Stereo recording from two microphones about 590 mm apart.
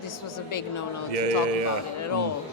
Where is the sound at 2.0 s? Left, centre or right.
Left.